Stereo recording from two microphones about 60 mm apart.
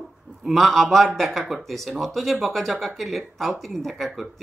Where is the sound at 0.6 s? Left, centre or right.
Centre.